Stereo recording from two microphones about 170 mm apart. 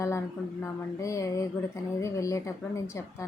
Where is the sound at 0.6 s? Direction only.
20° left (ahead or behind).